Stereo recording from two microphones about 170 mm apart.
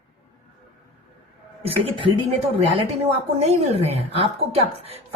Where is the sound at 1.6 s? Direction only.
30° right (ahead or behind).